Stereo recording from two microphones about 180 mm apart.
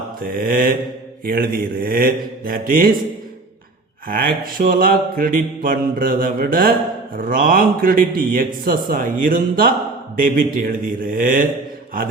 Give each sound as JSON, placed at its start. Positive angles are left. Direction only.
{"t": 0.2, "sound": "mantra", "side_deg": -50}
{"t": 4.1, "sound": "mantra", "side_deg": -50}